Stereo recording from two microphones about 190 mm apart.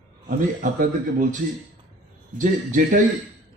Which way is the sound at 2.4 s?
45° right (ahead or behind).